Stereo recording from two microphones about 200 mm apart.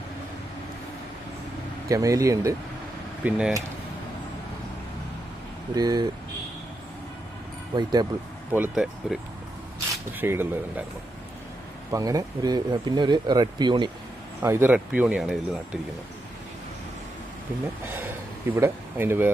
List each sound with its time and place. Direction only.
1.9 s speech: 15° right (ahead or behind)
3.2 s speech: 5° right (ahead or behind)
5.7 s speech: 20° right (ahead or behind)
7.8 s speech: 20° right (ahead or behind)
8.5 s speech: 5° right (ahead or behind)
11.9 s speech: 15° right (ahead or behind)
14.4 s speech: 10° right (ahead or behind)
17.9 s a sound: 10° right (ahead or behind)